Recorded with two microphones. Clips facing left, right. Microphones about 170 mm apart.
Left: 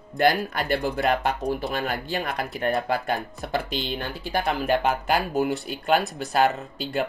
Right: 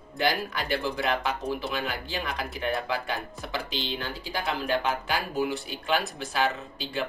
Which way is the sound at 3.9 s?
55° left (ahead or behind).